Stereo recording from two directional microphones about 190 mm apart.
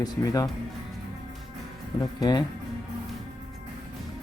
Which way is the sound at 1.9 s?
20° left (ahead or behind).